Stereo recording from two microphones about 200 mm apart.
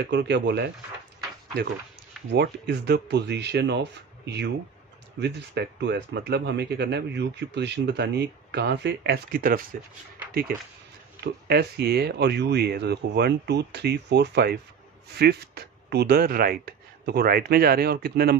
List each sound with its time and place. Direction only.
0.0 s speech: 60° right (ahead or behind)
2.3 s speech: 55° right (ahead or behind)
11.2 s speech: 55° right (ahead or behind)